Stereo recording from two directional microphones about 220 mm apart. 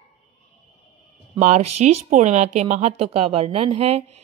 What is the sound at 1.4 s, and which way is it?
A woman's voice, 30° right (ahead or behind).